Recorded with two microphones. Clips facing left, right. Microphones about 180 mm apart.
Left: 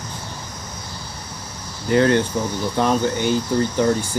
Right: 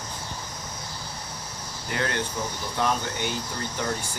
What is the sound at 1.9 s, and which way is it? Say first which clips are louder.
Speech: left 12 dB; 30° left (ahead or behind).